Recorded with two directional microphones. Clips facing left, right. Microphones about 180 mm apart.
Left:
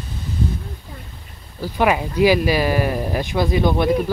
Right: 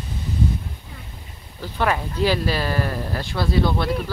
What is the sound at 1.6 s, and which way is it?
Speech, 10° left (ahead or behind).